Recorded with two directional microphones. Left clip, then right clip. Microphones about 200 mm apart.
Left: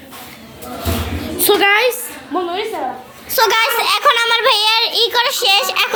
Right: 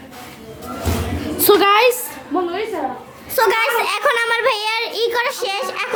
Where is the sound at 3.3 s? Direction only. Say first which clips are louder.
Left 2 dB; 10° right (ahead or behind).